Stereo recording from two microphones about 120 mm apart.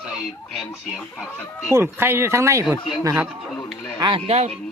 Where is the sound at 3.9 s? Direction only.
40° right (ahead or behind).